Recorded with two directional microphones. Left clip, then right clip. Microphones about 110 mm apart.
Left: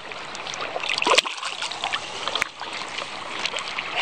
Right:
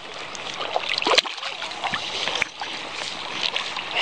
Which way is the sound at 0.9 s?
25° left (ahead or behind).